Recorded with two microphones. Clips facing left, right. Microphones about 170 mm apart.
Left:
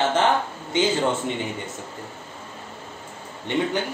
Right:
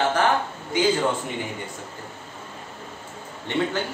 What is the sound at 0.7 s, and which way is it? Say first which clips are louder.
Speech: even; 25° left (ahead or behind).